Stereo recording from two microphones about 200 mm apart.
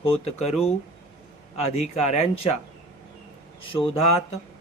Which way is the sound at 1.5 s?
30° left (ahead or behind).